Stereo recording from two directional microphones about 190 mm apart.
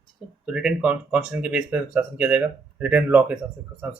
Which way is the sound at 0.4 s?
5° right (ahead or behind).